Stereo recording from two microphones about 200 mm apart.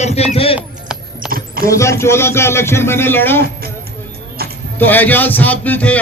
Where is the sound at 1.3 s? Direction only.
45° right (ahead or behind).